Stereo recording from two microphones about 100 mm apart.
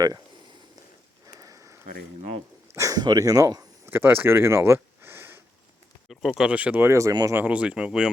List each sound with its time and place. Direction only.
1.4 s a sound: 35° right (ahead or behind)
2.7 s speech: 30° right (ahead or behind)
3.8 s speech: 20° right (ahead or behind)
6.1 s speech: centre (ahead or behind)
6.9 s speech: 35° right (ahead or behind)
7.3 s speech: 15° right (ahead or behind)